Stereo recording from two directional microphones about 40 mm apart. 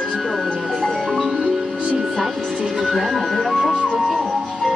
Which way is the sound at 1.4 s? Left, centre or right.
Centre.